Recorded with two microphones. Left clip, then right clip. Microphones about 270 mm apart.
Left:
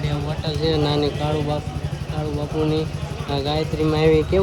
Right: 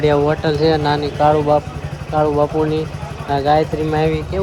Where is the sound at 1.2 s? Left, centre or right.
Centre.